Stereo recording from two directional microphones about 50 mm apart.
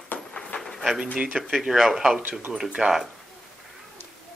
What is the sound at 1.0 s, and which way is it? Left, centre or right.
Speech, centre.